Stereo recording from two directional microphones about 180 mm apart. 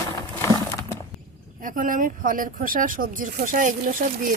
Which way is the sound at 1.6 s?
50° right (ahead or behind).